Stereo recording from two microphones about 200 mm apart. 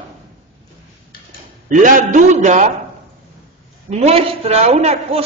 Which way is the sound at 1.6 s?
40° right (ahead or behind).